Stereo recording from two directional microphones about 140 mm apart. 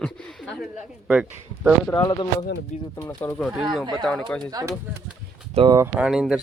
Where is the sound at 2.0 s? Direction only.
30° left (ahead or behind).